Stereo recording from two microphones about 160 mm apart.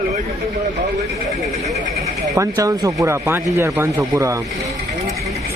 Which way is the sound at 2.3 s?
20° right (ahead or behind).